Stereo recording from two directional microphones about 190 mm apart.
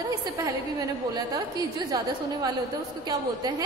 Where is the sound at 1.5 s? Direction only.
20° right (ahead or behind).